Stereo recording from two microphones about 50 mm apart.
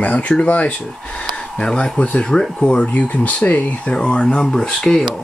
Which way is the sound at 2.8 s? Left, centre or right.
Left.